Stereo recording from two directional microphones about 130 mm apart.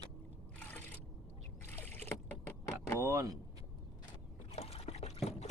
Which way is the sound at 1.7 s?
15° left (ahead or behind).